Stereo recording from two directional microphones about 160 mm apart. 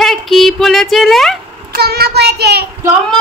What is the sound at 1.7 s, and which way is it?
Child singing, 80° right.